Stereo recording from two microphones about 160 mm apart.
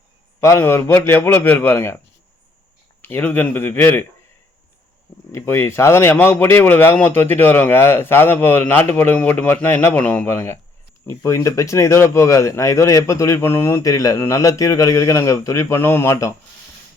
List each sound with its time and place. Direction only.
0.3 s speech: 15° left (ahead or behind)
3.0 s speech: 10° left (ahead or behind)
5.3 s speech: 15° left (ahead or behind)